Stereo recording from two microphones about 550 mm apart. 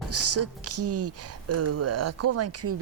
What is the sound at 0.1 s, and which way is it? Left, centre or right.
Speech, right.